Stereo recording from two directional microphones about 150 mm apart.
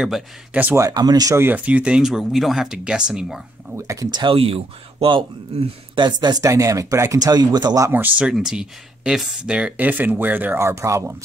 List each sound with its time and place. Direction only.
0.0 s speech: 5° right (ahead or behind)
0.8 s speech: 25° right (ahead or behind); by 3.4 s 5° right (ahead or behind)
3.7 s speech: 20° right (ahead or behind)